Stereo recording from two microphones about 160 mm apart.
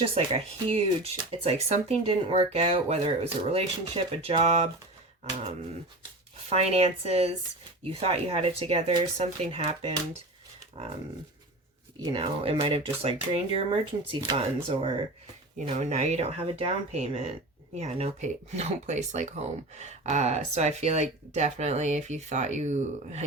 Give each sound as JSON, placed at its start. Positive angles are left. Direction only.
{"t": 0.0, "sound": "speech", "side_deg": -35}
{"t": 6.5, "sound": "speech", "side_deg": -40}
{"t": 12.1, "sound": "speech", "side_deg": -35}